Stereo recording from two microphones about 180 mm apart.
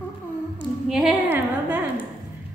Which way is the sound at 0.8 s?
Centre (ahead or behind).